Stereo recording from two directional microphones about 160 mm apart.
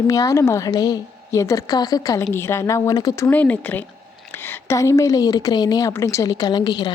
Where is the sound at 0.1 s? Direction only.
20° left (ahead or behind).